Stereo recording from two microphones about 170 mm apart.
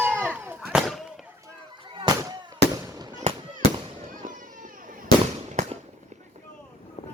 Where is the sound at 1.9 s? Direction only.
25° right (ahead or behind).